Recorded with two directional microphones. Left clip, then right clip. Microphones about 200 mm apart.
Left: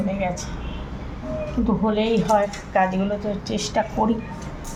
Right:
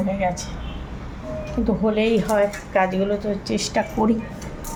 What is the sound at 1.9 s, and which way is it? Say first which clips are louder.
A woman's voice: even; 10° right (ahead or behind).